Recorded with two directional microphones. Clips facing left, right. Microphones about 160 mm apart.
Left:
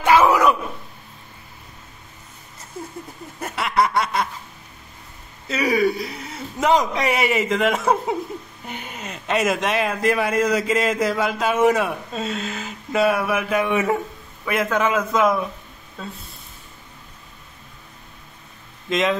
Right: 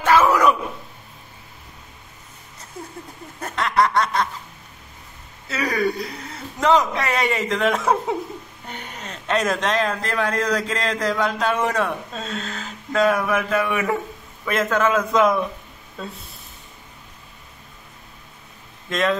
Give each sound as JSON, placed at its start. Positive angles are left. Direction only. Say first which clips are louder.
{"t": 0.0, "sound": "a sound", "louder": "left 1 dB", "side_deg": 10}
{"t": 3.3, "sound": "snicker", "louder": "right 1 dB", "side_deg": 5}
{"t": 5.5, "sound": "a man's voice", "louder": "left 3 dB", "side_deg": 10}
{"t": 13.7, "sound": "a man's voice", "louder": "left 2 dB", "side_deg": 20}
{"t": 14.4, "sound": "a man's voice", "louder": "right 1 dB", "side_deg": 10}
{"t": 18.9, "sound": "a man's voice", "louder": "left 1 dB", "side_deg": 15}